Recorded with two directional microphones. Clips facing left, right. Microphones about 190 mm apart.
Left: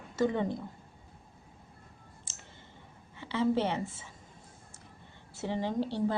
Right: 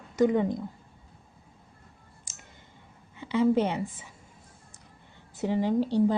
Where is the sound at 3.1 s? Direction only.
15° right (ahead or behind).